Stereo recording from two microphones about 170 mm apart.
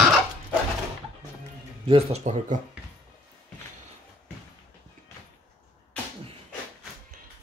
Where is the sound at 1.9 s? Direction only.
35° right (ahead or behind).